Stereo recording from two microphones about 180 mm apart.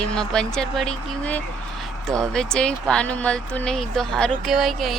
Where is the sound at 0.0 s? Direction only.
5° left (ahead or behind).